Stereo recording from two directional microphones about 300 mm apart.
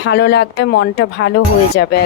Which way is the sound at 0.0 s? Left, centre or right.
Left.